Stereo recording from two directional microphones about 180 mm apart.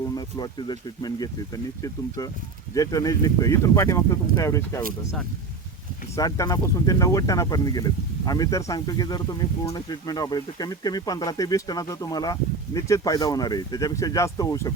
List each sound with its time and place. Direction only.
0.1 s speech: 25° left (ahead or behind)
6.1 s speech: 20° left (ahead or behind)